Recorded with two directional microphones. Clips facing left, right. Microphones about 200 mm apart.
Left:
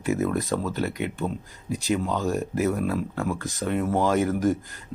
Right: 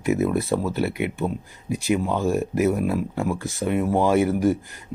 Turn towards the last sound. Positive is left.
turn(degrees=-15)  # may be behind; listen again after turning